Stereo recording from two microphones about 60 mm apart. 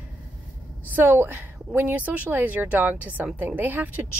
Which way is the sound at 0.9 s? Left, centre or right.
Right.